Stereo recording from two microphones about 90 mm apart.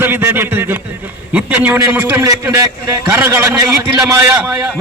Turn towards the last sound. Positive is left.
turn(degrees=-15)  # may be behind; listen again after turning